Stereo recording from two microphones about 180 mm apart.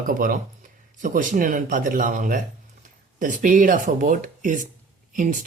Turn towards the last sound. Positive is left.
turn(degrees=-45)  # may be behind; listen again after turning